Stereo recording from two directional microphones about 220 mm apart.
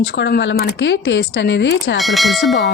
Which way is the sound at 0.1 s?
50° left (ahead or behind).